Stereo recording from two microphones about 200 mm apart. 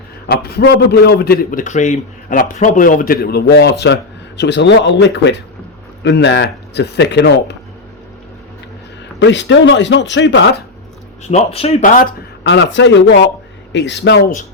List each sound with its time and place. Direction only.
0.3 s a man's voice: 50° left (ahead or behind)
9.1 s speech: 65° left (ahead or behind)
11.2 s speech: 35° left (ahead or behind)
12.4 s speech: 60° left (ahead or behind)